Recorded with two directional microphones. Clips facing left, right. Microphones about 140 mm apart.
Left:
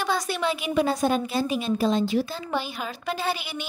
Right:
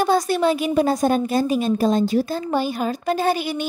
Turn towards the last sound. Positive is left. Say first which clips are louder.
# right 8 dB
turn(degrees=-45)  # may be behind; listen again after turning